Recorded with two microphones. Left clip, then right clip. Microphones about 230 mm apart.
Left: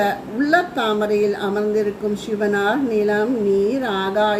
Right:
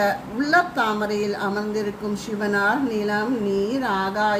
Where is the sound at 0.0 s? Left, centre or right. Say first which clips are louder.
Left 2 dB; right.